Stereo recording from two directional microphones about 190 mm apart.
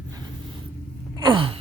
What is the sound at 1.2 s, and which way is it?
Sigh, 25° right (ahead or behind).